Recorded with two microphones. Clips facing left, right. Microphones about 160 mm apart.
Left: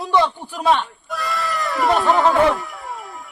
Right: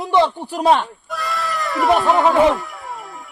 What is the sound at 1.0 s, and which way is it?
Speech, centre (ahead or behind).